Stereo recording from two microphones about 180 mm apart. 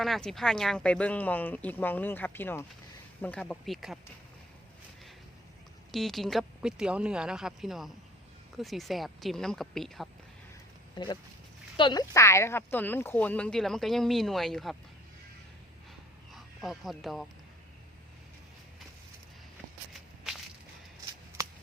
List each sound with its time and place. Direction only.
0.0 s speech: centre (ahead or behind)
5.9 s speech: centre (ahead or behind)
10.9 s speech: 25° left (ahead or behind); by 14.8 s centre (ahead or behind)
16.3 s speech: centre (ahead or behind)